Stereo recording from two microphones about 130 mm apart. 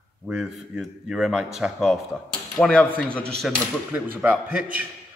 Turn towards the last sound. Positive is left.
turn(degrees=-10)  # may be behind; listen again after turning